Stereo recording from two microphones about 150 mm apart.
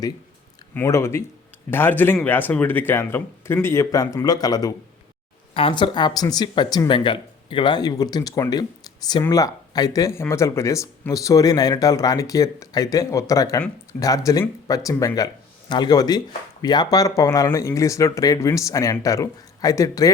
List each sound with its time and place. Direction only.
0.7 s speech: 15° left (ahead or behind)